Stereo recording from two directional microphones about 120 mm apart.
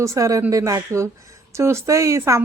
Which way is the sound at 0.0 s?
25° right (ahead or behind).